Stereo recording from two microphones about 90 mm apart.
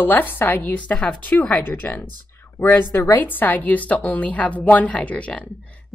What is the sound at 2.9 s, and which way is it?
Speech, 30° left (ahead or behind).